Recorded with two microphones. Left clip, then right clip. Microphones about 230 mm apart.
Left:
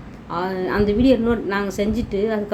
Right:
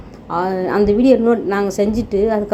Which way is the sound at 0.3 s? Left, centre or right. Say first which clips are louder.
Right 5 dB; centre.